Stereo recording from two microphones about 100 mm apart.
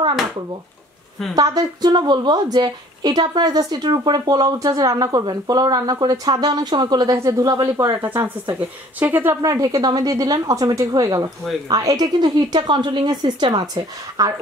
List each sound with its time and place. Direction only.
1.3 s a woman's voice: 40° right (ahead or behind); by 9.4 s 20° right (ahead or behind)
9.4 s a woman's voice: 35° right (ahead or behind)
13.7 s a woman's voice: 35° right (ahead or behind)